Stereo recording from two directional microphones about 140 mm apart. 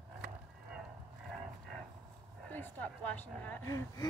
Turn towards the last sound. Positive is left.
turn(degrees=25)  # may be behind; listen again after turning